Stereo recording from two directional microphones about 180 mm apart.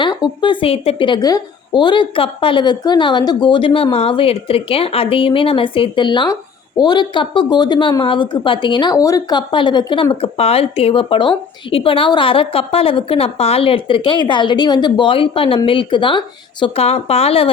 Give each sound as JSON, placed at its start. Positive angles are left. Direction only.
{"t": 0.0, "sound": "a woman's voice", "side_deg": 25}